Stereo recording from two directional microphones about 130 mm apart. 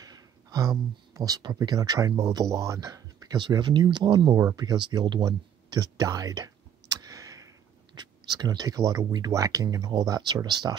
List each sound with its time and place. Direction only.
0.0 s speech: 30° right (ahead or behind)